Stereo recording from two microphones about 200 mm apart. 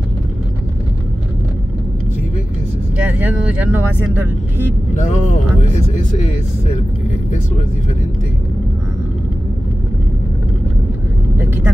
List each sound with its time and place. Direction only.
3.0 s speech: 5° right (ahead or behind)
4.9 s speech: 35° left (ahead or behind)
11.3 s vehicle: 10° right (ahead or behind)